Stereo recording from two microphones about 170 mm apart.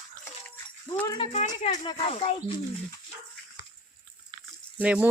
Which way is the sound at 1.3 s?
45° left (ahead or behind).